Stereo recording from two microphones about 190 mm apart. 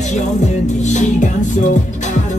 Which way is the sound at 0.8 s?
40° left (ahead or behind).